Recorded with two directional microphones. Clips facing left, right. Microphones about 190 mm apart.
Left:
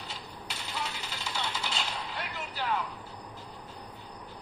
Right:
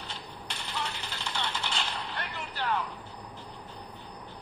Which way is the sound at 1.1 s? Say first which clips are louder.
Right 1 dB; 5° left (ahead or behind).